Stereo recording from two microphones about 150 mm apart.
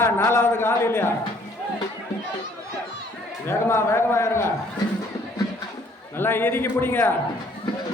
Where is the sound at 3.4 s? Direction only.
15° left (ahead or behind).